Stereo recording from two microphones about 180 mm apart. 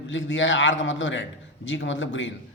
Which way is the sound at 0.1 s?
90° left.